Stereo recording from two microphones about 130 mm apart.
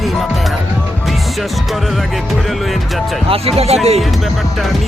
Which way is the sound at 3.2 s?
50° right (ahead or behind).